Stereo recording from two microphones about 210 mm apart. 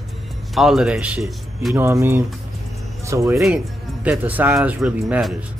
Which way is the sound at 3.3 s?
5° right (ahead or behind).